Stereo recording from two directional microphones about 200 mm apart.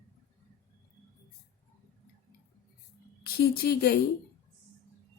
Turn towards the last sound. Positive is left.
turn(degrees=50)  # may be behind; listen again after turning